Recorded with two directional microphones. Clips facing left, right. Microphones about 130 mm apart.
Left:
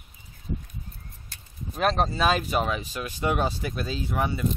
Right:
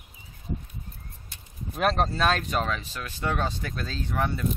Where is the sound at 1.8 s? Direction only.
Centre (ahead or behind).